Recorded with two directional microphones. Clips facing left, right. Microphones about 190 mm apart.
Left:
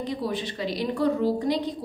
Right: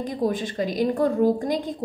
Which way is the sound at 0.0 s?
45° right (ahead or behind).